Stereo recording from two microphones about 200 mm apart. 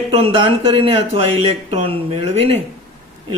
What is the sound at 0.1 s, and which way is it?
Speech, 30° right (ahead or behind).